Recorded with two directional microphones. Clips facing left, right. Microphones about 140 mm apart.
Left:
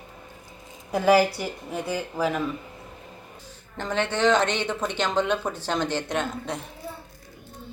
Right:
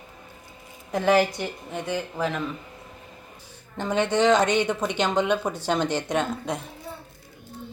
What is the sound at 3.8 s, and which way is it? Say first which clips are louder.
Speech: right 2 dB; 10° right (ahead or behind).